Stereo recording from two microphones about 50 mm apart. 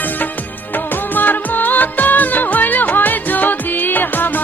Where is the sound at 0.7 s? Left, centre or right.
Left.